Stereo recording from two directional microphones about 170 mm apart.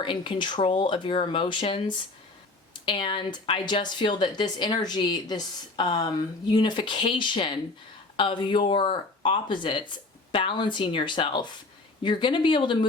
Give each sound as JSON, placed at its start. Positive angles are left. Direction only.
{"t": 0.0, "sound": "a woman's voice", "side_deg": 30}